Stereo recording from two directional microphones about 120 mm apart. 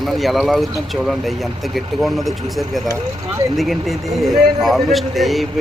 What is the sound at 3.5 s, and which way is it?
Speech, centre (ahead or behind).